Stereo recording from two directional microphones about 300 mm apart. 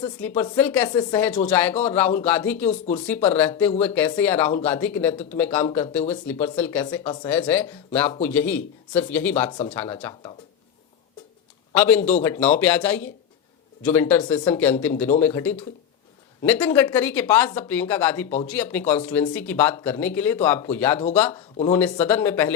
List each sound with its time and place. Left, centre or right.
0.2 s speech: centre
2.6 s speech: left
3.1 s speech: centre
11.7 s a man's voice: centre